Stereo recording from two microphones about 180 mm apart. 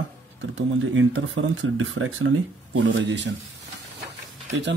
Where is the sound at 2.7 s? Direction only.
75° right (ahead or behind).